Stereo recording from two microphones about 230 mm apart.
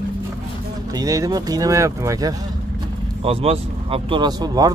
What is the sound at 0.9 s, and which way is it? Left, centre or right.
Speech, centre.